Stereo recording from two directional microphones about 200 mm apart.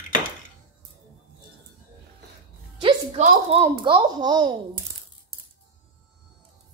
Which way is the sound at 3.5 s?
25° right (ahead or behind).